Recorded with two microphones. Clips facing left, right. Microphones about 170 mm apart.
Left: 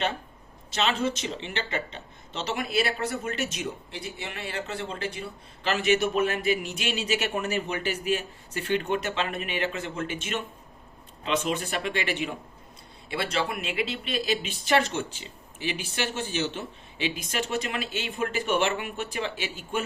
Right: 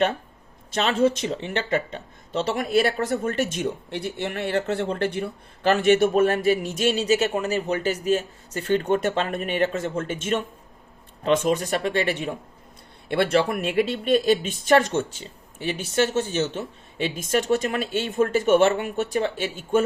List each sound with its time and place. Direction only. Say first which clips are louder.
0.8 s speech: right 6 dB; 55° right (ahead or behind)
13.1 s speech: right 8 dB; 55° right (ahead or behind)
16.1 s speech: right 6 dB; 45° right (ahead or behind)